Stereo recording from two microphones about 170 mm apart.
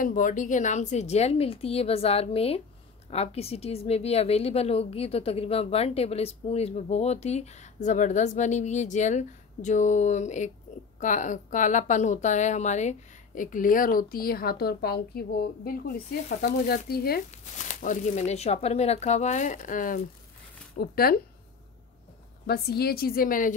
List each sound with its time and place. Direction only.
0.0 s a woman's voice: 50° left (ahead or behind)
17.6 s speech: 50° left (ahead or behind)
22.5 s speech: 65° left (ahead or behind)